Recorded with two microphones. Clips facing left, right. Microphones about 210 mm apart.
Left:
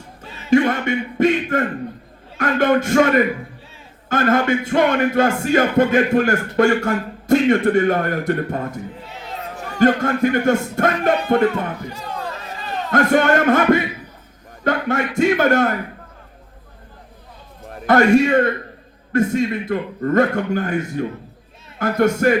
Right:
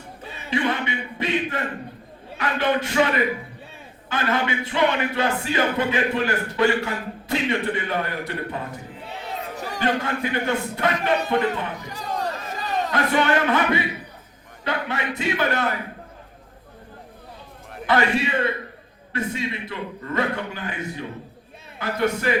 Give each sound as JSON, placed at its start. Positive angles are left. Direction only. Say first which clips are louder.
{"t": 0.2, "sound": "a sound", "louder": "left 10 dB", "side_deg": 45}
{"t": 2.4, "sound": "music", "louder": "left 6 dB", "side_deg": 45}
{"t": 9.7, "sound": "music", "louder": "left 9 dB", "side_deg": 45}
{"t": 12.9, "sound": "music", "louder": "left 7 dB", "side_deg": 45}
{"t": 17.7, "sound": "a man's voice", "louder": "left 8 dB", "side_deg": 45}
{"t": 19.1, "sound": "music", "louder": "left 10 dB", "side_deg": 45}